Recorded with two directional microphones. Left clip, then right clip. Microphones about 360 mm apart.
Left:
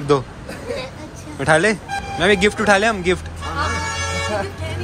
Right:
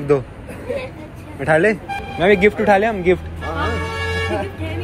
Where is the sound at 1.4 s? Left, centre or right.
Centre.